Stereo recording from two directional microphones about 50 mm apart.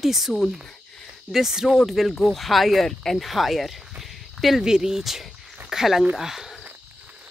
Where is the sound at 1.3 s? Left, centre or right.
Centre.